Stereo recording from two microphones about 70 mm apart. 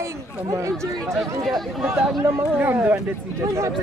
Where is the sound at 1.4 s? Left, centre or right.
Centre.